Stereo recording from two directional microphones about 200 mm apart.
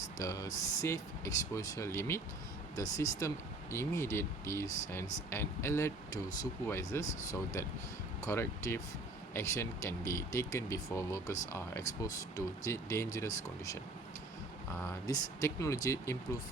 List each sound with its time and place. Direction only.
0.2 s speech: 15° left (ahead or behind)
14.8 s speech: 15° left (ahead or behind)